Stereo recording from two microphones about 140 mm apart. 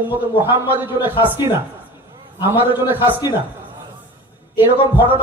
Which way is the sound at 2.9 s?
15° right (ahead or behind).